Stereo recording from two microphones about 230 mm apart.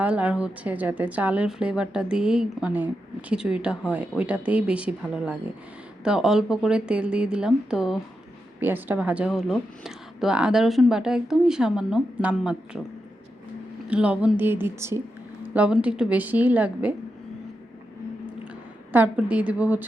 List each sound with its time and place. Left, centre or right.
0.0 s a woman's voice: centre
13.9 s a woman's voice: centre
18.9 s speech: centre